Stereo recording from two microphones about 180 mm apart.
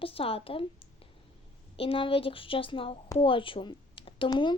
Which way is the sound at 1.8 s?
30° left (ahead or behind).